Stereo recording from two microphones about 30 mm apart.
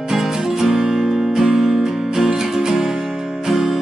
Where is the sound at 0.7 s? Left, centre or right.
Right.